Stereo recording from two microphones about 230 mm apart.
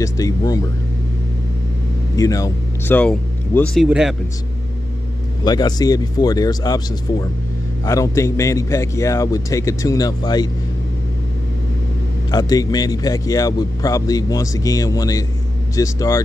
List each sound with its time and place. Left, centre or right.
0.0 s a man's voice: centre
2.1 s speech: centre
5.4 s a man's voice: centre
12.3 s a man's voice: centre